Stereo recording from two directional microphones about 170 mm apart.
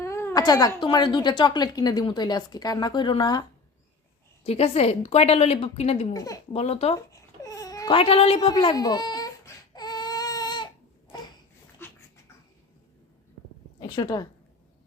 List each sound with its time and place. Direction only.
0.0 s speech: 15° left (ahead or behind)
4.4 s a woman's voice: 35° left (ahead or behind)
6.1 s speech: 20° left (ahead or behind)
6.5 s a woman's voice: 40° left (ahead or behind)
6.9 s baby cry: 20° left (ahead or behind)
7.9 s a woman's voice: 35° left (ahead or behind)
8.4 s speech: 25° left (ahead or behind)
9.7 s baby cry: 25° left (ahead or behind)
11.8 s dog: 10° left (ahead or behind)
13.7 s a woman's voice: 25° left (ahead or behind)